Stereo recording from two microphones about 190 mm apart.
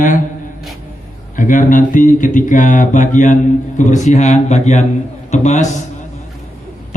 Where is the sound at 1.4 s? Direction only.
45° left (ahead or behind).